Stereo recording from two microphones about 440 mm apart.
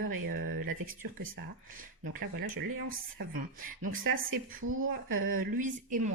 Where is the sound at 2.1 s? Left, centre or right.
Right.